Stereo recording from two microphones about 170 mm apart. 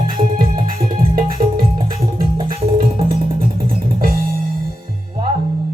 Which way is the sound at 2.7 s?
60° right (ahead or behind).